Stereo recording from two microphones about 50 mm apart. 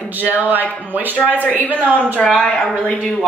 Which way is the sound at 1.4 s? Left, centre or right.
Left.